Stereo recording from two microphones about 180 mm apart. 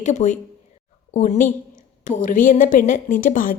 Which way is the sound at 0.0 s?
40° left (ahead or behind).